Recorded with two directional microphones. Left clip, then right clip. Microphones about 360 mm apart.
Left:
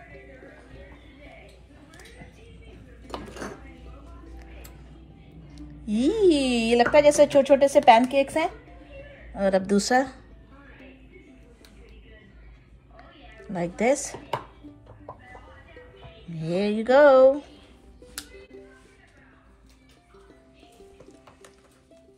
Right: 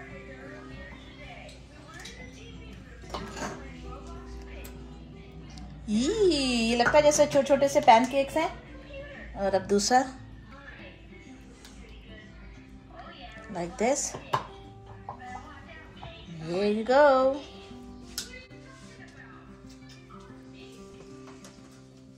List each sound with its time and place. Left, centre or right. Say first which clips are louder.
5.6 s a woman's voice: left 4 dB; left
13.5 s speech: left 4 dB; left
16.3 s a woman's voice: left 2 dB; left